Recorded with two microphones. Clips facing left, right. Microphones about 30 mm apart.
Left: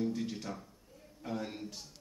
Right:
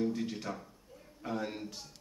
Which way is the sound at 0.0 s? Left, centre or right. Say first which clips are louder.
Right 2 dB; centre.